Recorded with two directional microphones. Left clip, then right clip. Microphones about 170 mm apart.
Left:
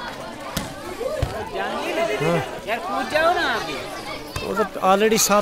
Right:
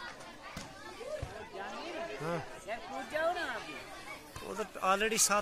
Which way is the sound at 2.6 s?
40° right (ahead or behind).